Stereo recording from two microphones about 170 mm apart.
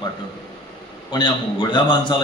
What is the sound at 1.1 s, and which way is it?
A man's voice, 25° left (ahead or behind).